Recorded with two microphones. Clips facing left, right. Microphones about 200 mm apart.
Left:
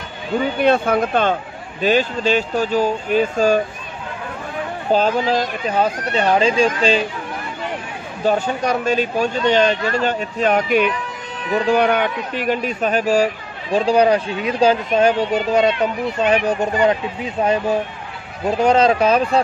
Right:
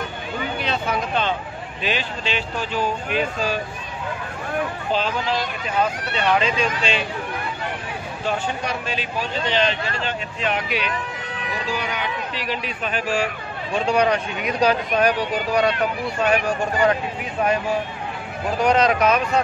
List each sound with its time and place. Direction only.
0.6 s speech: 55° left (ahead or behind)
4.9 s speech: 45° left (ahead or behind)
8.3 s speech: 40° left (ahead or behind)
11.5 s speech: 60° left (ahead or behind); by 17.5 s 25° left (ahead or behind)
18.6 s speech: 30° left (ahead or behind)